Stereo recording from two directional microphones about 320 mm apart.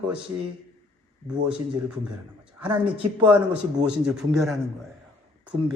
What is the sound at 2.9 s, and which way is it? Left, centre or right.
Speech, centre.